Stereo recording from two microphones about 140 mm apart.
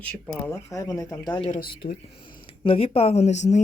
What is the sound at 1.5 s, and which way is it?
Speech, 90° left.